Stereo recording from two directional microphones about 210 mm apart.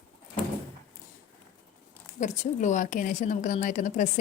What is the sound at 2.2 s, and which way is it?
A woman's voice, 35° left (ahead or behind).